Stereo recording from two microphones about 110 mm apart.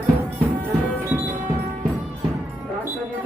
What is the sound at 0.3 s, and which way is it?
Music, 15° right (ahead or behind).